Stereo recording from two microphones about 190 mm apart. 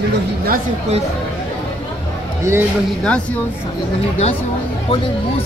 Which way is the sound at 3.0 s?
5° left (ahead or behind).